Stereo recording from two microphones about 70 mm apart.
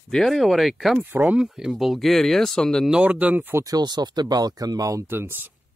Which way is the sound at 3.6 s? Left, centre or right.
Right.